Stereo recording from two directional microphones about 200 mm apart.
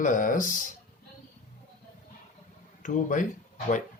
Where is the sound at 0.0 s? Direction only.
40° left (ahead or behind).